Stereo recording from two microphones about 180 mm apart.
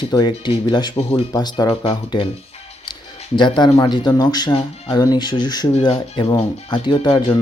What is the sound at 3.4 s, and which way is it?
Speech, 25° left (ahead or behind).